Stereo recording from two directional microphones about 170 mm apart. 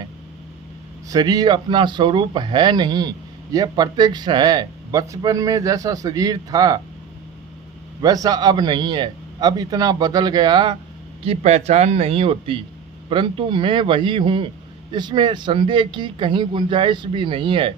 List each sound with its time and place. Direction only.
1.0 s speech: 20° right (ahead or behind)
8.0 s speech: 20° right (ahead or behind)
11.2 s speech: 35° right (ahead or behind)